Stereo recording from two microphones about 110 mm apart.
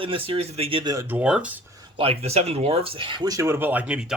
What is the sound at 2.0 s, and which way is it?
Speech, 65° right (ahead or behind).